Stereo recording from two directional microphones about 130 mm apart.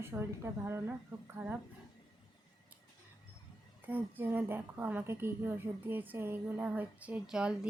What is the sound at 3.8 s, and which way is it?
A woman's voice, 15° right (ahead or behind).